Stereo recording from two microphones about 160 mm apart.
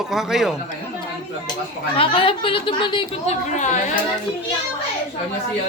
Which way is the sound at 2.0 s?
35° left (ahead or behind).